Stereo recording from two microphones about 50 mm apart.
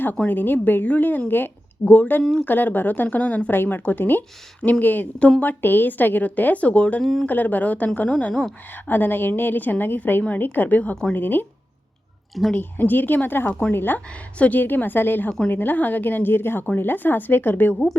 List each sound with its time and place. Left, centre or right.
0.3 s a woman's voice: left
3.5 s a woman's voice: left
7.0 s speech: centre
7.3 s a woman's voice: left
8.3 s speech: centre
8.7 s a woman's voice: left
12.5 s a woman's voice: left
14.3 s speech: left
14.6 s a woman's voice: left